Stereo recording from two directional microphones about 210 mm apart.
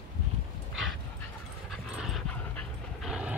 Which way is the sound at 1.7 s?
Centre (ahead or behind).